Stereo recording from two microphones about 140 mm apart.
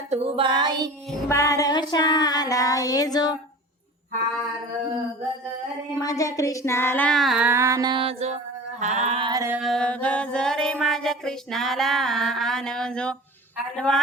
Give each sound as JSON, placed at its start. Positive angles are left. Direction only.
{"t": 0.1, "sound": "child singing", "side_deg": -45}
{"t": 1.3, "sound": "a sound", "side_deg": 20}
{"t": 6.0, "sound": "a sound", "side_deg": 25}
{"t": 7.2, "sound": "music", "side_deg": 0}
{"t": 7.4, "sound": "music", "side_deg": -20}
{"t": 8.8, "sound": "a sound", "side_deg": -50}
{"t": 9.3, "sound": "music", "side_deg": -20}
{"t": 9.6, "sound": "music", "side_deg": 5}
{"t": 13.7, "sound": "speech", "side_deg": 5}